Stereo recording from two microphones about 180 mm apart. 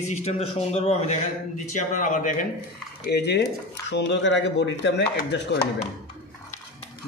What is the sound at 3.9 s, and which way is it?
Speech, 85° left.